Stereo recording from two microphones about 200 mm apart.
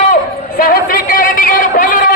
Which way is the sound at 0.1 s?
45° left (ahead or behind).